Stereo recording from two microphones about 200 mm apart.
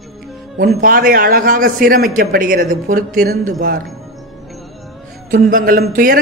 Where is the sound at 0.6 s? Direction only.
45° right (ahead or behind).